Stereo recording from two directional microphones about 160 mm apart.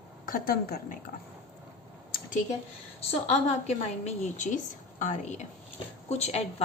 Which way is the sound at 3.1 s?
45° left (ahead or behind).